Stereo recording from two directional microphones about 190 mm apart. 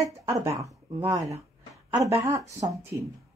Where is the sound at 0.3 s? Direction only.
15° right (ahead or behind).